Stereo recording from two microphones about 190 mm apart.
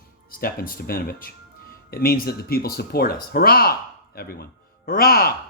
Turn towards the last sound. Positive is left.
turn(degrees=50)  # may be behind; listen again after turning